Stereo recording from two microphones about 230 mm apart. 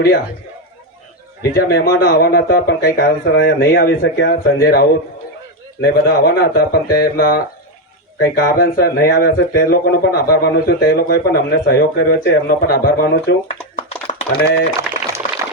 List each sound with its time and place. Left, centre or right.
1.4 s speech: left